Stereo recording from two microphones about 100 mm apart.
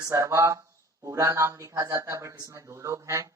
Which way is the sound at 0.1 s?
30° right (ahead or behind).